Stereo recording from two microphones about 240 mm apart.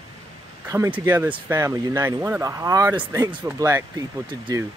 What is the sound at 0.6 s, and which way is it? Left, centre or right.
Speech, centre.